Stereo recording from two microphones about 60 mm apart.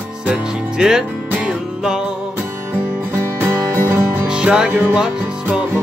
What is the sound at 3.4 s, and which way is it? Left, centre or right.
Music, right.